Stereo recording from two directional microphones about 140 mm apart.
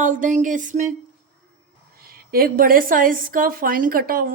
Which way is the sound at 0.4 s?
65° right (ahead or behind).